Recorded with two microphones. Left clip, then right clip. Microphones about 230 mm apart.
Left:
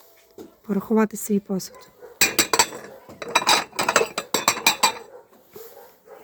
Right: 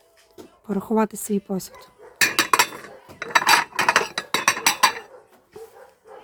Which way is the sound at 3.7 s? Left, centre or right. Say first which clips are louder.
Right 1 dB; centre.